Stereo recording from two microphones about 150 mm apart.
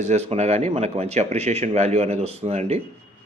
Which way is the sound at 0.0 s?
45° right (ahead or behind).